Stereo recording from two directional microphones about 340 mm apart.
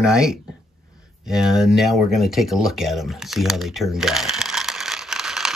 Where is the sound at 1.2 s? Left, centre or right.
Centre.